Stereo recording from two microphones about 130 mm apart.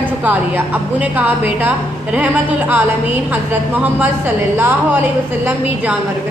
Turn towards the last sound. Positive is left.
turn(degrees=-10)  # may be behind; listen again after turning